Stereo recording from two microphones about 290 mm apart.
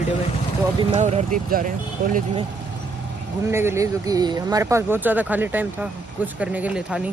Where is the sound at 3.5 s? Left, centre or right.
Centre.